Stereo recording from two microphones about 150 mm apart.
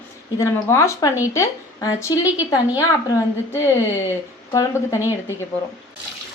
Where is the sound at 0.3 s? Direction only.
15° left (ahead or behind).